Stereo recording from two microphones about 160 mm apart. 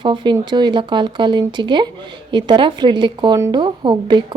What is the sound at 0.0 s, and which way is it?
Speech, 30° right (ahead or behind).